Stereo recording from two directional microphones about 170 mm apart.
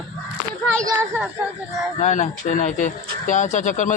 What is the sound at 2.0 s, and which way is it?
Speech, 45° left (ahead or behind).